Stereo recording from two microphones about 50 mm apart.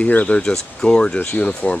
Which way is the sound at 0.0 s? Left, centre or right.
Left.